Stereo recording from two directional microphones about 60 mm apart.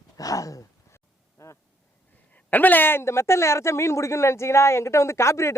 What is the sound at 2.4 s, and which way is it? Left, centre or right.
A woman's voice, left.